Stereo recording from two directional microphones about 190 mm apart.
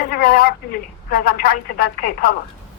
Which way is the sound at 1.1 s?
50° left (ahead or behind).